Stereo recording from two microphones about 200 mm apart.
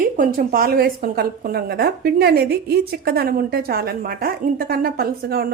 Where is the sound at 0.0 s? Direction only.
45° right (ahead or behind).